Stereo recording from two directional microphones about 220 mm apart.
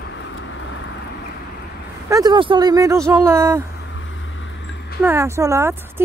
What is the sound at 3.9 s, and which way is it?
Vehicle, 60° left (ahead or behind).